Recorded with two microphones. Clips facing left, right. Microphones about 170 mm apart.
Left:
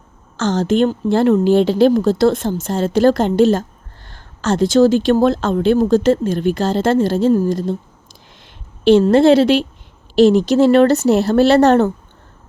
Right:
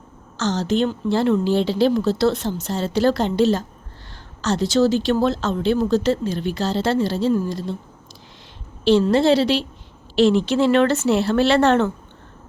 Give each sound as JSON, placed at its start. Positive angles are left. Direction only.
{"t": 0.3, "sound": "speech", "side_deg": 50}
{"t": 8.8, "sound": "speech", "side_deg": 55}
{"t": 10.2, "sound": "speech", "side_deg": 40}